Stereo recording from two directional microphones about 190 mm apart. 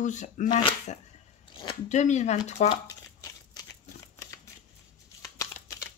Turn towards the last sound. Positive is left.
turn(degrees=15)  # may be behind; listen again after turning